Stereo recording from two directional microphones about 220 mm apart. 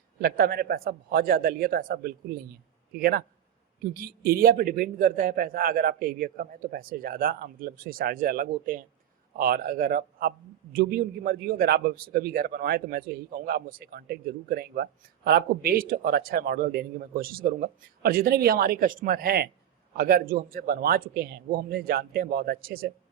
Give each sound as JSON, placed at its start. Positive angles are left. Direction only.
{"t": 0.2, "sound": "a man's voice", "side_deg": -45}